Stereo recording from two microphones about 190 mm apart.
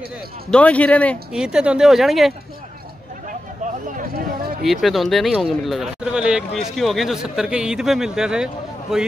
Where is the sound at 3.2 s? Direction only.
45° right (ahead or behind).